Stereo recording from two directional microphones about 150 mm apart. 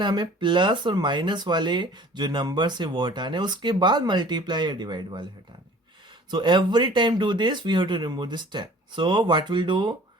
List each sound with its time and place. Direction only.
0.0 s speech: 30° right (ahead or behind)
6.3 s speech: 30° right (ahead or behind)